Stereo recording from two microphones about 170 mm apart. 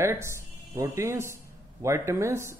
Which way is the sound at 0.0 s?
15° right (ahead or behind).